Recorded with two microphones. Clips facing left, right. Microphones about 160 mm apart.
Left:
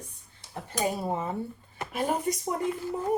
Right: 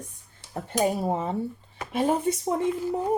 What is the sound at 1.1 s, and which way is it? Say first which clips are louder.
Speech: right 3 dB; 25° right (ahead or behind).